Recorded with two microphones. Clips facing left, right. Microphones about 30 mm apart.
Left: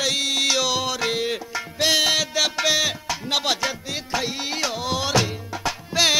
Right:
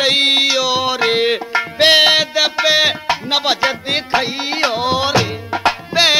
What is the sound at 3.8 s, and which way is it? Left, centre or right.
Music, right.